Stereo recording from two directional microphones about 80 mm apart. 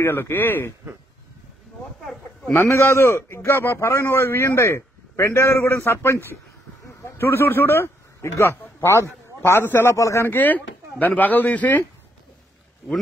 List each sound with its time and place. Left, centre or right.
0.0 s speech: left
2.5 s a man's voice: left
9.9 s a man's voice: left
10.2 s speech: left